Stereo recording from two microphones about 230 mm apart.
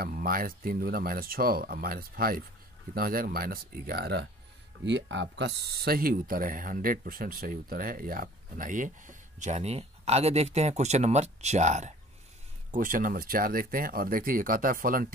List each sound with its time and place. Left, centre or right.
0.0 s speech: right